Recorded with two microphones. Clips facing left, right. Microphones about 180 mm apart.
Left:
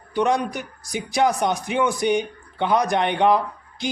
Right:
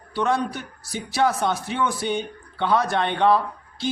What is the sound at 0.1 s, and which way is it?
A man's voice, 15° left (ahead or behind).